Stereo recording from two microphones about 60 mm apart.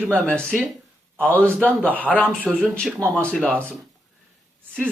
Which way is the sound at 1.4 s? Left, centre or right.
Centre.